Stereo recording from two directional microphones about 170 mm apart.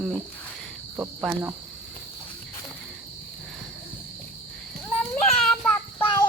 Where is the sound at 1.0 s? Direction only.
10° right (ahead or behind).